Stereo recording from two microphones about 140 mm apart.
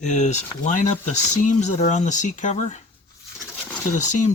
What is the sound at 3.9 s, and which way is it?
Speech, 60° left (ahead or behind).